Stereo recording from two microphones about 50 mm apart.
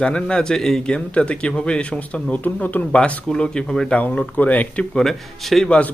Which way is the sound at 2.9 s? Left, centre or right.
Centre.